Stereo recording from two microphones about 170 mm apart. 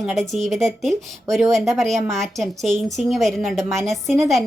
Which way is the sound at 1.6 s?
Centre (ahead or behind).